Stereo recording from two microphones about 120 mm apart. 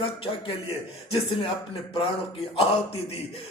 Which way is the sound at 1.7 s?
45° left (ahead or behind).